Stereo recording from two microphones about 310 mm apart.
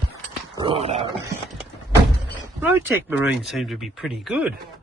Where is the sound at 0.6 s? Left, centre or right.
Centre.